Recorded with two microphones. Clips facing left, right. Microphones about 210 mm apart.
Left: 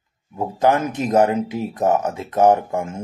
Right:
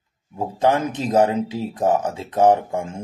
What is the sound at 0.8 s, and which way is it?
Speech, 30° right (ahead or behind).